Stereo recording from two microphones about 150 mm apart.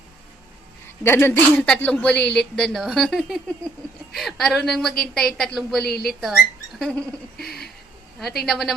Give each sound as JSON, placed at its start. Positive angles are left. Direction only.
{"t": 1.0, "sound": "speech", "side_deg": 15}
{"t": 5.8, "sound": "speech", "side_deg": 90}
{"t": 6.1, "sound": "speech", "side_deg": 0}